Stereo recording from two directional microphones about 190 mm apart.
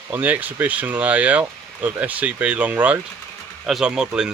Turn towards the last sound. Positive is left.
turn(degrees=-5)  # may be behind; listen again after turning